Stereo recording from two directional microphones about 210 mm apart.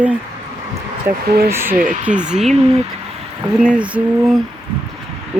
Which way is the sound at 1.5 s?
10° right (ahead or behind).